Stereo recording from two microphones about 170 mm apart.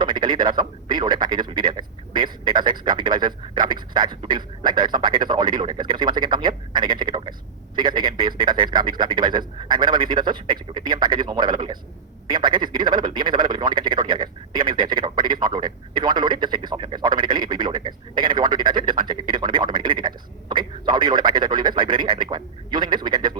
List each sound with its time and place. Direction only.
0.0 s speech: 25° right (ahead or behind)